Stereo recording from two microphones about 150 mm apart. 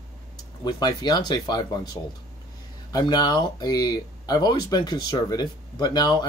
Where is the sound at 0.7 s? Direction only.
25° left (ahead or behind).